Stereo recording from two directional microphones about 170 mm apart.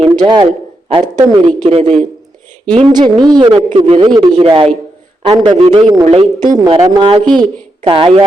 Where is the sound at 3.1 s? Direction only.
25° right (ahead or behind).